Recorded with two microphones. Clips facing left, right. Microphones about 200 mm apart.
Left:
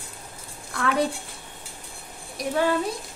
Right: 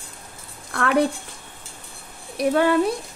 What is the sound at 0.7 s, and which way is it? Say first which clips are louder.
Speech: right 4 dB; 60° right (ahead or behind).